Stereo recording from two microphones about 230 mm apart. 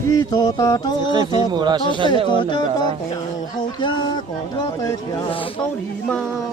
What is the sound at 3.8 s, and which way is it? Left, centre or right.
Speech, centre.